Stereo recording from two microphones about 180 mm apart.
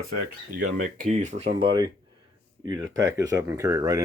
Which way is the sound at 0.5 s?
45° right (ahead or behind).